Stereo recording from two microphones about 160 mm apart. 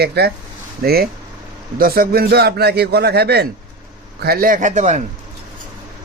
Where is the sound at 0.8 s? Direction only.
75° right (ahead or behind); by 3.5 s 90° right.